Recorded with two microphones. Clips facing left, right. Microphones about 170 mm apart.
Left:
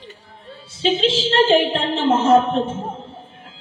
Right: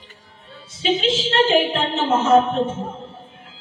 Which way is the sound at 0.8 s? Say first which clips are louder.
Left 2 dB; 30° left (ahead or behind).